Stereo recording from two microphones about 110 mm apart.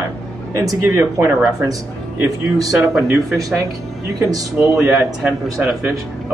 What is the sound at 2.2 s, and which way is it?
Speech, 30° right (ahead or behind).